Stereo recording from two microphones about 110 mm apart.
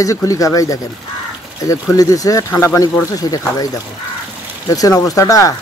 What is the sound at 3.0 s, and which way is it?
Speech, 35° left (ahead or behind).